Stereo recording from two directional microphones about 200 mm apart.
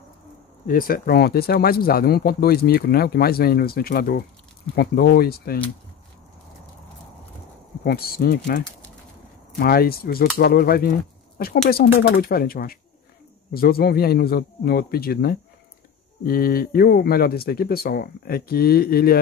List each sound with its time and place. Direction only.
0.7 s speech: 45° left (ahead or behind)
7.8 s speech: 50° left (ahead or behind)
9.6 s speech: 50° left (ahead or behind)